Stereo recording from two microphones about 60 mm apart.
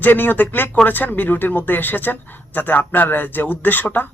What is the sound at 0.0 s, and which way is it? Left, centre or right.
Speech, left.